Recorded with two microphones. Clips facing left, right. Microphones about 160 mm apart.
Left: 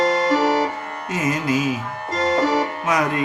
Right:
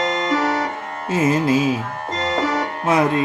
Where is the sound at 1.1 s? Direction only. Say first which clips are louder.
Right 5 dB; 30° right (ahead or behind).